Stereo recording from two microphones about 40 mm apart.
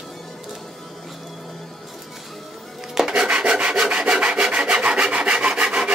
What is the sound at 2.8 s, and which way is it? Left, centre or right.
Rub, centre.